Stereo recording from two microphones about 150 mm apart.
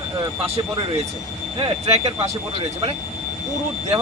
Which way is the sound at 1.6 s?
40° right (ahead or behind).